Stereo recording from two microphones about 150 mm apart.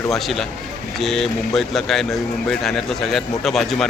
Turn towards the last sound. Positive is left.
turn(degrees=0)  # may be behind; listen again after turning